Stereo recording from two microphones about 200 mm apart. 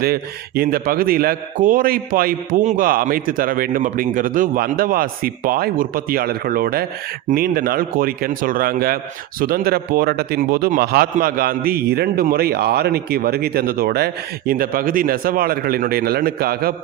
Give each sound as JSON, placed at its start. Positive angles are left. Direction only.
{"t": 0.0, "sound": "a man's voice", "side_deg": -50}